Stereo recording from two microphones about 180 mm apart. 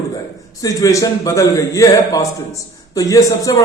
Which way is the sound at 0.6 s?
20° left (ahead or behind).